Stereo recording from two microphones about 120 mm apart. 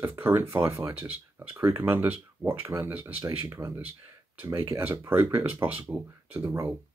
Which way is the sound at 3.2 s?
25° right (ahead or behind).